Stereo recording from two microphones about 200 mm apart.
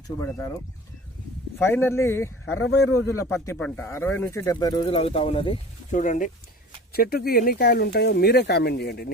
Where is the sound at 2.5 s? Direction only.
75° left (ahead or behind).